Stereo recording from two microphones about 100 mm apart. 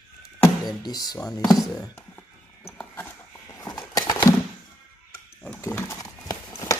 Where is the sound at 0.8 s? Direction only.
40° left (ahead or behind).